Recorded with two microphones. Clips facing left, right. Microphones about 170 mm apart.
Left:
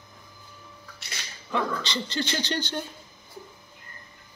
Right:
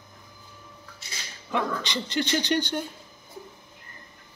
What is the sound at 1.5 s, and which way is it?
Speech, 15° right (ahead or behind).